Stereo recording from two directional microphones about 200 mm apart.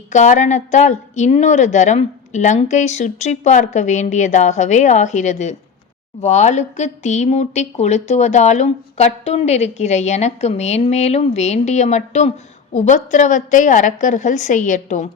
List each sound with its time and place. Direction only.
0.1 s speech: 35° left (ahead or behind)